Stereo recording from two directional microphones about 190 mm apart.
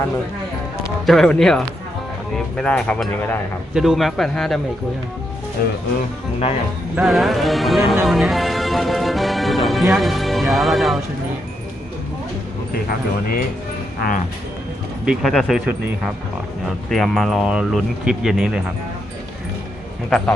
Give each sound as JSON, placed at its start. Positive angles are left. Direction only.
{"t": 0.9, "sound": "speech", "side_deg": 0}
{"t": 5.6, "sound": "speech", "side_deg": 50}
{"t": 6.9, "sound": "speech", "side_deg": 0}
{"t": 8.0, "sound": "music", "side_deg": 0}
{"t": 15.0, "sound": "speech", "side_deg": 0}
{"t": 20.1, "sound": "speech", "side_deg": 5}